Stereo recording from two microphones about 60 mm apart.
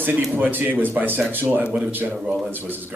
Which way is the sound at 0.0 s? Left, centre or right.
Right.